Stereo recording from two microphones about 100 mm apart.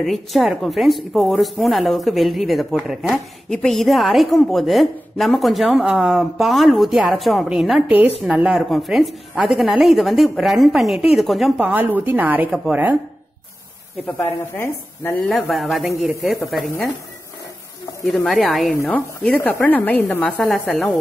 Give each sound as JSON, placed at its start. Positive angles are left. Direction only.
{"t": 0.0, "sound": "a woman's voice", "side_deg": 0}
{"t": 8.6, "sound": "a woman's voice", "side_deg": 0}
{"t": 11.6, "sound": "speech", "side_deg": -20}
{"t": 12.4, "sound": "a woman's voice", "side_deg": -5}
{"t": 14.0, "sound": "a woman's voice", "side_deg": 20}
{"t": 15.5, "sound": "a woman's voice", "side_deg": 0}
{"t": 18.0, "sound": "a woman's voice", "side_deg": 0}
{"t": 18.9, "sound": "speech", "side_deg": 15}
{"t": 20.3, "sound": "a woman's voice", "side_deg": 5}